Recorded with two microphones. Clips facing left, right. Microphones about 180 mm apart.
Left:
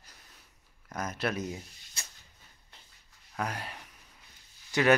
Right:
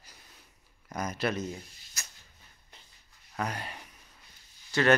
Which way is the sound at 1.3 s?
15° left (ahead or behind).